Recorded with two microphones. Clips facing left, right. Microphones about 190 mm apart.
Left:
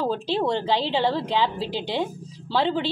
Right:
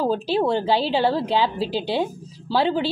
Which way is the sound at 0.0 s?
10° right (ahead or behind).